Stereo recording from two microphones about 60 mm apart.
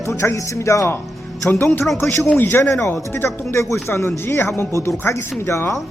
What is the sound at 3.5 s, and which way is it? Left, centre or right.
Speech, left.